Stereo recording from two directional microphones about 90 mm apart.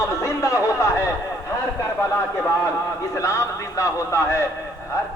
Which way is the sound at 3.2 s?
35° left (ahead or behind).